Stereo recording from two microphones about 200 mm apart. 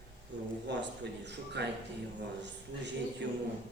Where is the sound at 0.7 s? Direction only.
60° right (ahead or behind).